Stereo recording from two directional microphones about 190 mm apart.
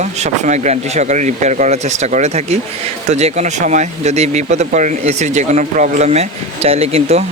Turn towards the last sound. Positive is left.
turn(degrees=-30)  # may be behind; listen again after turning